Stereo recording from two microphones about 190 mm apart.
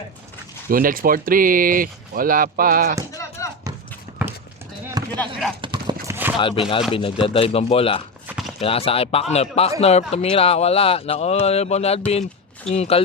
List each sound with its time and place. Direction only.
0.7 s speech: 50° right (ahead or behind)
3.1 s a sound: 15° left (ahead or behind)
5.1 s speech: 5° left (ahead or behind)
5.6 s clip-clop: 25° right (ahead or behind)
6.4 s speech: 25° left (ahead or behind)
8.3 s clip-clop: centre (ahead or behind)
8.6 s speech: 30° left (ahead or behind)